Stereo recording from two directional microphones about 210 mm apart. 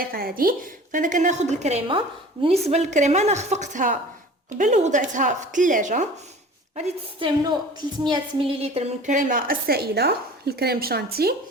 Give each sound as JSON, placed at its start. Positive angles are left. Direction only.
{"t": 0.1, "sound": "a woman's voice", "side_deg": -45}
{"t": 6.7, "sound": "a woman's voice", "side_deg": -25}